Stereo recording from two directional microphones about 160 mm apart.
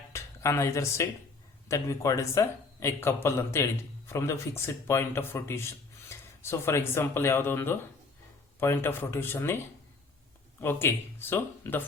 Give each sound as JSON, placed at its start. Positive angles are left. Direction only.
{"t": 0.1, "sound": "speech", "side_deg": 15}
{"t": 10.6, "sound": "speech", "side_deg": 15}